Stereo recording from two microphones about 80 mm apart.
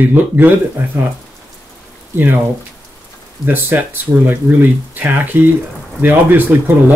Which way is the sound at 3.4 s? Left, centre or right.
Right.